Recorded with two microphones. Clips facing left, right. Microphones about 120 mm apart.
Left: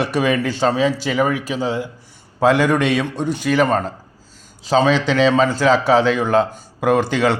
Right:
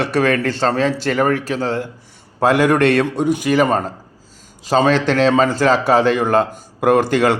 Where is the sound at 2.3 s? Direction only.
5° right (ahead or behind).